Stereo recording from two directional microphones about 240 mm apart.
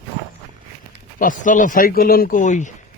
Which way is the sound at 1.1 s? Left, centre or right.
Left.